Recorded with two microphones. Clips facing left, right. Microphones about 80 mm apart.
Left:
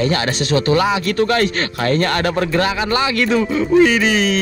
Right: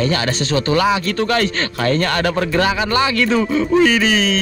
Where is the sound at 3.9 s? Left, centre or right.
Left.